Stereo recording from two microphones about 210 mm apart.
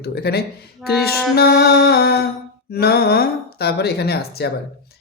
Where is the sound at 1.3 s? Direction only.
50° left (ahead or behind).